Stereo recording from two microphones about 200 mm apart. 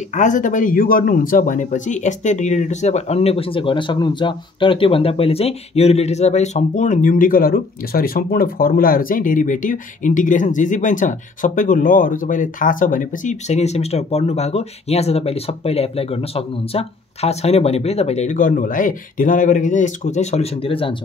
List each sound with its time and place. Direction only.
0.1 s speech: 40° left (ahead or behind)